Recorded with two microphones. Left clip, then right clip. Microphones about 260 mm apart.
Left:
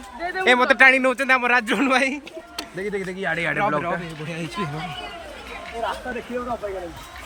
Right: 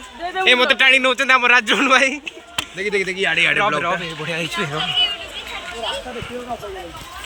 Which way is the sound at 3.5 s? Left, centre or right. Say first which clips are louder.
Right 4 dB; centre.